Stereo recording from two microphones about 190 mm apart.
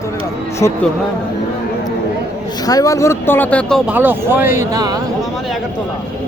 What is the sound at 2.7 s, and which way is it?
A man's voice, 20° left (ahead or behind).